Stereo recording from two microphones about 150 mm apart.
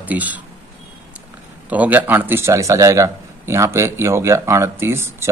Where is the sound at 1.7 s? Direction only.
10° right (ahead or behind).